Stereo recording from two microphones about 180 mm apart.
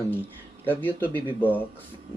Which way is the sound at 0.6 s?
10° left (ahead or behind).